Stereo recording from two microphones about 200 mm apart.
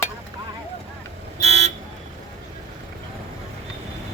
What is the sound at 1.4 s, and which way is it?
Vehicle, 35° right (ahead or behind).